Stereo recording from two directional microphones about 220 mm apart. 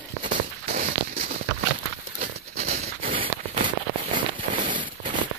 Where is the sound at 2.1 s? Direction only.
35° right (ahead or behind).